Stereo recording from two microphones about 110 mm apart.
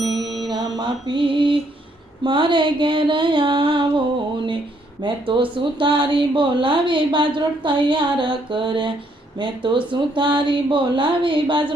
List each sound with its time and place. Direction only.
0.0 s music: centre (ahead or behind)
0.5 s a sound: 45° right (ahead or behind)
2.2 s speech: 50° right (ahead or behind)
5.0 s speech: 50° right (ahead or behind)